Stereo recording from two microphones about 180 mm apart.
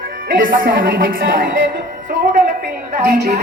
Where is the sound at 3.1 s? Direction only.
55° right (ahead or behind).